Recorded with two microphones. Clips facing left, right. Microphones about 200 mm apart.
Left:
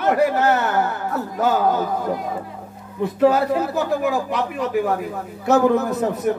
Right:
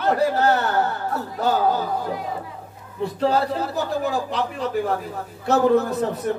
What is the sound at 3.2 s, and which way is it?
Speech, 15° left (ahead or behind).